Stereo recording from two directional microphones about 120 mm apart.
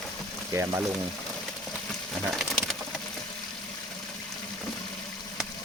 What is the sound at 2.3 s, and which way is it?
Pigeon, centre (ahead or behind).